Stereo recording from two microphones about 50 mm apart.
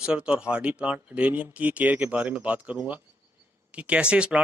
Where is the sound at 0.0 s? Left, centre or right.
Centre.